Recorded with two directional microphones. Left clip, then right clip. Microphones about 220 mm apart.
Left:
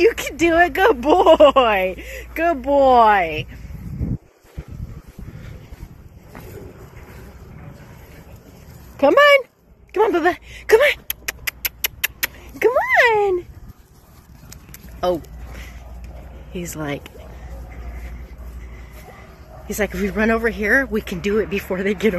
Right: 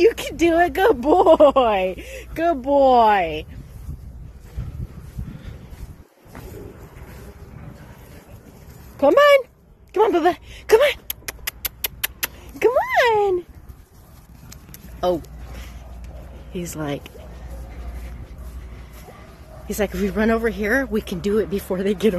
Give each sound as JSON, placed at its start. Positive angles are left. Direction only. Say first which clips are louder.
{"t": 0.0, "sound": "speech", "louder": "left 1 dB", "side_deg": -10}
{"t": 6.3, "sound": "vehicle", "louder": "left 1 dB", "side_deg": -10}
{"t": 9.1, "sound": "speech", "louder": "left 1 dB", "side_deg": -20}
{"t": 9.9, "sound": "a sound", "louder": "even", "side_deg": -15}
{"t": 14.5, "sound": "a sound", "louder": "left 1 dB", "side_deg": -15}
{"t": 16.5, "sound": "a woman's voice", "louder": "left 1 dB", "side_deg": -15}
{"t": 19.7, "sound": "speech", "louder": "left 1 dB", "side_deg": -10}